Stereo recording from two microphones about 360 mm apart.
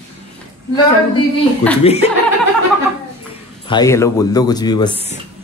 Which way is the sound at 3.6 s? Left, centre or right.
Centre.